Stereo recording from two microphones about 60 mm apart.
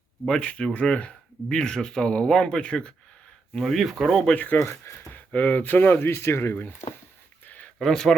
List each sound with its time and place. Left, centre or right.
0.3 s speech: centre
3.5 s speech: centre
4.4 s speech: left
4.6 s speech: left
5.1 s speech: left
6.6 s speech: left
7.4 s a sound: left
7.8 s speech: centre